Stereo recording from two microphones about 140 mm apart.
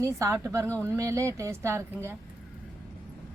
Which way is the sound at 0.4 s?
20° right (ahead or behind).